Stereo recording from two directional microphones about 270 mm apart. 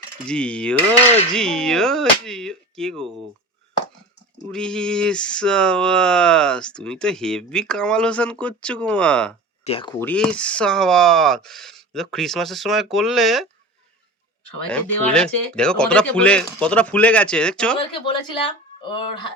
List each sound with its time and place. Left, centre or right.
0.3 s speech: centre
4.5 s speech: centre
9.6 s speech: centre
14.7 s speech: centre
17.9 s speech: centre